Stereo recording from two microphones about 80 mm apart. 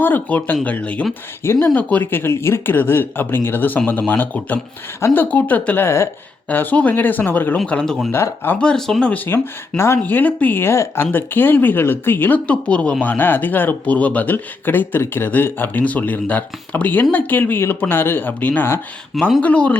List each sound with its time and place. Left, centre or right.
0.0 s speech: left
4.9 s speech: left
5.2 s speech: centre
7.7 s speech: centre
8.1 s speech: left
8.5 s speech: centre
9.1 s speech: left
12.5 s speech: centre